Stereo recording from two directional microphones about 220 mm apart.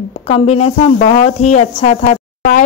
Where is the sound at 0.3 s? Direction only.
30° left (ahead or behind).